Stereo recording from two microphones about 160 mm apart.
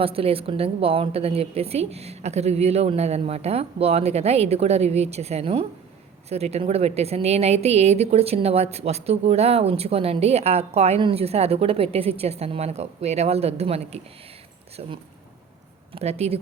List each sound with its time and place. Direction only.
0.0 s a woman's voice: 35° right (ahead or behind)
16.0 s a woman's voice: 40° right (ahead or behind)